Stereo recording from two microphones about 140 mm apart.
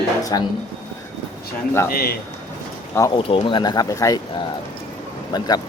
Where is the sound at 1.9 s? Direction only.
90° left.